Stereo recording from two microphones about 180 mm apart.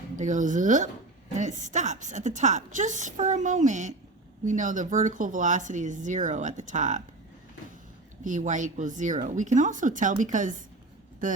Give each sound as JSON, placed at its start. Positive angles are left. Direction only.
{"t": 0.2, "sound": "a woman's voice", "side_deg": -45}
{"t": 8.2, "sound": "a woman's voice", "side_deg": -45}